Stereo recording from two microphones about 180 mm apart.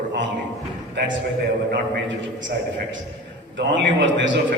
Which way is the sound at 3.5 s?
90° right.